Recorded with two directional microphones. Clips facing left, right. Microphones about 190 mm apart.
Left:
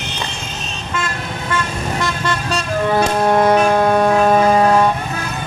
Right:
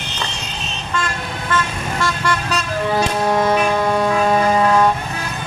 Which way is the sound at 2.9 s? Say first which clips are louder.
Left 3 dB; 55° left (ahead or behind).